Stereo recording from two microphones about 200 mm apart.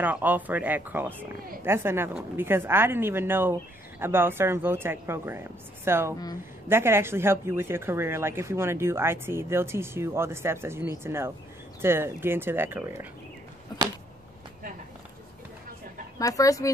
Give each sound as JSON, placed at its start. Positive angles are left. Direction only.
{"t": 0.0, "sound": "speech", "side_deg": -10}
{"t": 16.2, "sound": "speech", "side_deg": 15}